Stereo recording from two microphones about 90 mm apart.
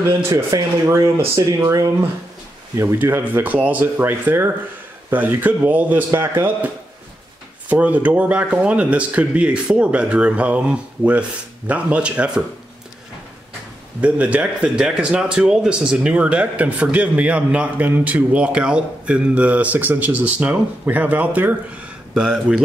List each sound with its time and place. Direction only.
0.3 s speech: 40° right (ahead or behind)
2.7 s speech: 30° right (ahead or behind); by 12.3 s 15° right (ahead or behind)
14.0 s speech: 15° right (ahead or behind)